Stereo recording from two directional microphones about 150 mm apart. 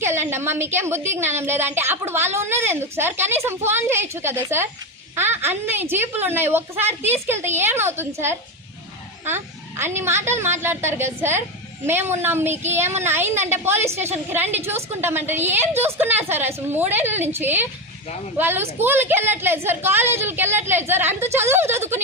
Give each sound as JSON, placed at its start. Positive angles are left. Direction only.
{"t": 0.0, "sound": "a woman's voice", "side_deg": -15}